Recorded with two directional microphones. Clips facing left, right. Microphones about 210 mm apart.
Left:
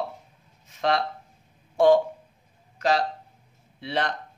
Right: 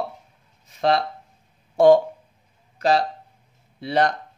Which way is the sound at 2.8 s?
35° right (ahead or behind).